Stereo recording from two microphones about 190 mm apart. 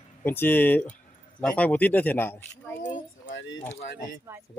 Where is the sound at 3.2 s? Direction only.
80° left.